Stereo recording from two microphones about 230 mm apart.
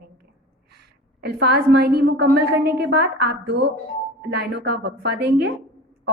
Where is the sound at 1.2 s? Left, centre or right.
Right.